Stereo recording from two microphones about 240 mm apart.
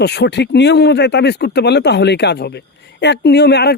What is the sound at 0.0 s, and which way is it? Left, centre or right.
Speech, left.